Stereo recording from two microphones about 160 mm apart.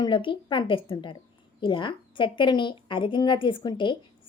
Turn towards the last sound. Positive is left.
turn(degrees=30)  # may be behind; listen again after turning